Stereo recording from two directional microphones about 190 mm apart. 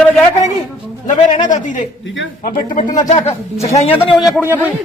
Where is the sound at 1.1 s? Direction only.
40° left (ahead or behind).